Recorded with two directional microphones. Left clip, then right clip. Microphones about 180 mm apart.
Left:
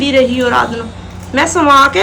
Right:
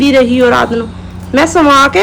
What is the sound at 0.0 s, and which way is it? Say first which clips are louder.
A woman's voice: right 3 dB; 10° right (ahead or behind).